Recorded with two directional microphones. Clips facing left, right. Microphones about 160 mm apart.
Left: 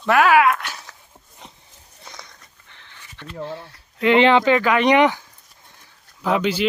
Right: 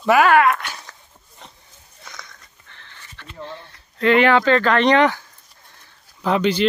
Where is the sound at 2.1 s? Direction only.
30° left (ahead or behind).